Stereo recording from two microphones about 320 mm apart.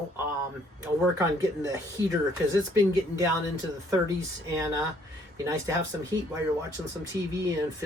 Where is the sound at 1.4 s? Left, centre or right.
Centre.